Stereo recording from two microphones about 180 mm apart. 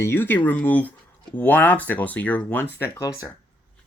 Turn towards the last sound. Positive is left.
turn(degrees=15)  # may be behind; listen again after turning